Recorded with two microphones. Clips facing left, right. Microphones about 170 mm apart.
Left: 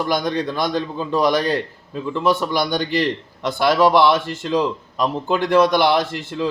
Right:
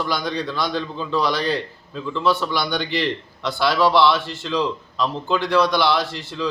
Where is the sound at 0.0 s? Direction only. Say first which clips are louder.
Left 4 dB; 50° left (ahead or behind).